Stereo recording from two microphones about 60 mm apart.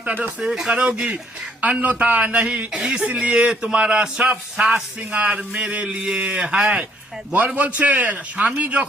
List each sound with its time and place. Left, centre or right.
0.0 s speech: right
0.3 s speech: centre; by 8.9 s right